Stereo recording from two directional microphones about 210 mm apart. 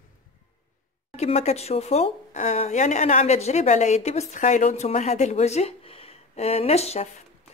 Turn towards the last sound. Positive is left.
turn(degrees=30)  # may be behind; listen again after turning